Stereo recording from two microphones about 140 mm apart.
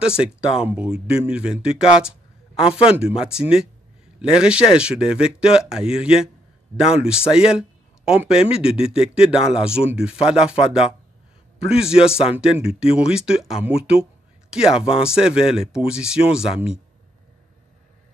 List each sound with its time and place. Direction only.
0.2 s speech: 5° right (ahead or behind)
8.4 s speech: 45° left (ahead or behind)
8.9 s speech: 5° right (ahead or behind)
13.6 s speech: 45° left (ahead or behind)
14.5 s speech: 5° right (ahead or behind)